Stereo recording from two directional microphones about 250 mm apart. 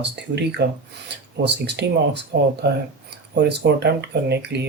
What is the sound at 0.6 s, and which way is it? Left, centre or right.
Speech, right.